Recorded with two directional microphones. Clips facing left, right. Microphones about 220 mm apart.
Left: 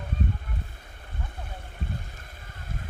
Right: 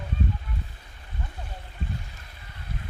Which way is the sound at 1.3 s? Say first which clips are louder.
Even; 55° left (ahead or behind).